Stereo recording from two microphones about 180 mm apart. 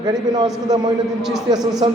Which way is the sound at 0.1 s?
20° right (ahead or behind).